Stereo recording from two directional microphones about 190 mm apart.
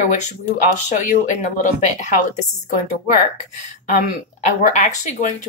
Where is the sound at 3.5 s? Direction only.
40° left (ahead or behind).